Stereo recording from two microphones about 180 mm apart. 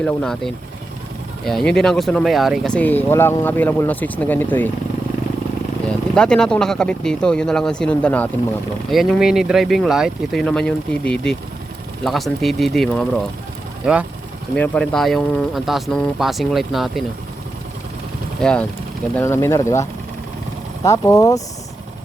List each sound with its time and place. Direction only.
0.0 s speech: 5° left (ahead or behind)
6.1 s speech: 5° left (ahead or behind)
14.5 s speech: 10° left (ahead or behind)
18.4 s speech: 5° left (ahead or behind)